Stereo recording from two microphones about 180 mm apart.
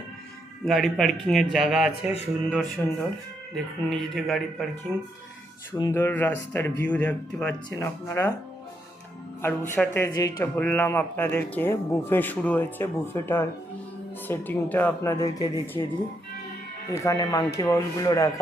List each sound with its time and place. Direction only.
0.6 s speech: centre (ahead or behind)
5.7 s speech: 25° left (ahead or behind)
6.0 s speech: 10° left (ahead or behind)
9.4 s speech: 10° left (ahead or behind)
16.9 s speech: 15° left (ahead or behind)